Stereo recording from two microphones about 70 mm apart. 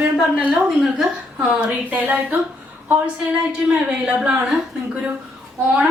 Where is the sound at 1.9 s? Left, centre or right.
Right.